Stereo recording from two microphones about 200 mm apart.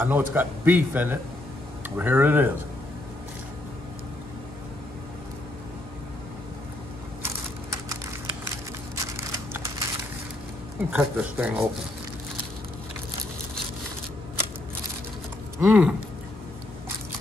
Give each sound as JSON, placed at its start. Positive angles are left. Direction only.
{"t": 0.0, "sound": "a man's voice", "side_deg": -10}
{"t": 7.2, "sound": "typing", "side_deg": -15}
{"t": 8.9, "sound": "crushing", "side_deg": -15}
{"t": 10.9, "sound": "a man's voice", "side_deg": -5}
{"t": 15.6, "sound": "a man's voice", "side_deg": -5}